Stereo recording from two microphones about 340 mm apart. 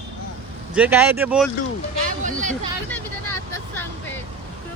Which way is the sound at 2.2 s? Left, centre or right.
Right.